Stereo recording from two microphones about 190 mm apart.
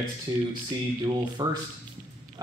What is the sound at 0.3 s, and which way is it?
Speech, 20° right (ahead or behind).